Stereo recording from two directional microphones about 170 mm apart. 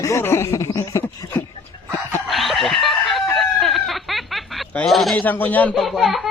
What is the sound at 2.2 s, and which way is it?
Chicken, centre (ahead or behind).